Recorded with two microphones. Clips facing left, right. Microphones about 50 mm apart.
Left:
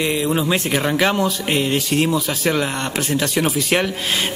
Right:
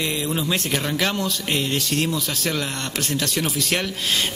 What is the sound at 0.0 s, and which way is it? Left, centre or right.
Speech, centre.